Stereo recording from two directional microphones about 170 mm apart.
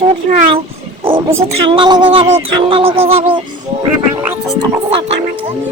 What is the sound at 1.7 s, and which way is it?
Music, 25° right (ahead or behind).